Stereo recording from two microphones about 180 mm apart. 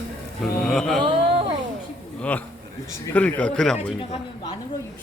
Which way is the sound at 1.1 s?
30° right (ahead or behind).